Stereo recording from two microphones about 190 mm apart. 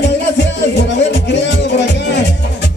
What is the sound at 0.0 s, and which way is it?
Music, 65° left (ahead or behind).